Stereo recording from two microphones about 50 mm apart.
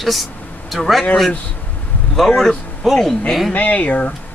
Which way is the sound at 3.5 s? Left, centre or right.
Left.